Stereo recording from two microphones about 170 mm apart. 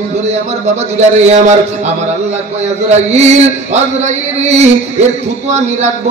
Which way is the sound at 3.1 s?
40° right (ahead or behind).